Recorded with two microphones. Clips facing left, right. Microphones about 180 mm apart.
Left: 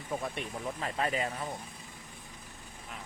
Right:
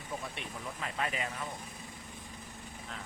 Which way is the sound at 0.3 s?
35° left (ahead or behind).